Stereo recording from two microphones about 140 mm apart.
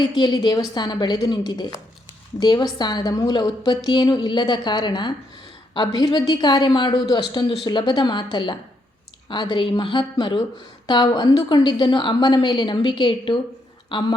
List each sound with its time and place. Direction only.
0.2 s a woman's voice: 30° left (ahead or behind)